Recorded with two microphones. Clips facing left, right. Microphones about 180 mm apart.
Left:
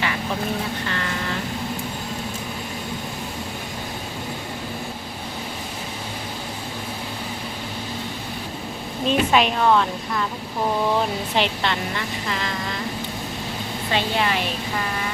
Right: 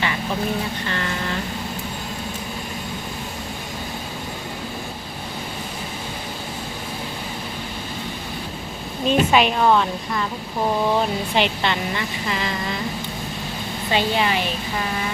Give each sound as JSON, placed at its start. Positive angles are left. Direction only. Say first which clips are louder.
{"t": 9.0, "sound": "a woman's voice", "louder": "right 2 dB", "side_deg": 0}
{"t": 11.3, "sound": "a woman's voice", "louder": "right 1 dB", "side_deg": -5}
{"t": 13.9, "sound": "a woman's voice", "louder": "right 2 dB", "side_deg": -5}